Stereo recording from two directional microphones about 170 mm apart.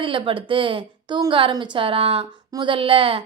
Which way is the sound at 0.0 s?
30° right (ahead or behind).